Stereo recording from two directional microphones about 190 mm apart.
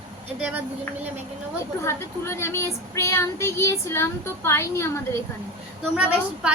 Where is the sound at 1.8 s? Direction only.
15° left (ahead or behind).